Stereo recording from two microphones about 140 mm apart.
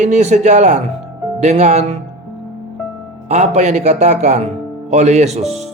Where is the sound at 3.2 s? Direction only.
55° right (ahead or behind).